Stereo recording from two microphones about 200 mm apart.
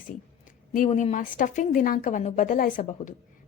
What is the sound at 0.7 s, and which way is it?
A woman's voice, 40° left (ahead or behind).